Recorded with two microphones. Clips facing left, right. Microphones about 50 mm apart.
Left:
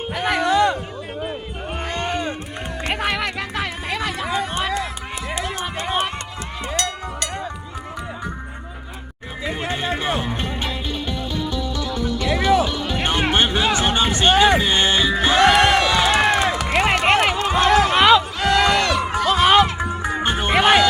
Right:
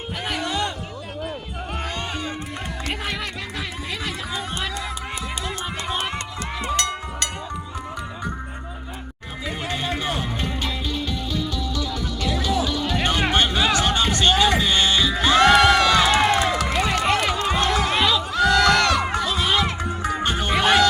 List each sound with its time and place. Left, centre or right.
0.2 s music: left
1.8 s music: left
2.9 s music: left
4.2 s a sound: left
9.5 s music: left
15.6 s crowd: centre
16.7 s run: left
17.7 s music: left
18.3 s a sound: left
18.6 s a sound: centre
19.2 s music: left
20.0 s music: left
20.5 s music: left